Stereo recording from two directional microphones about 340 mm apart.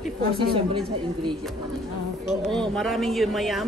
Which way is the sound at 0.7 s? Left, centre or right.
Centre.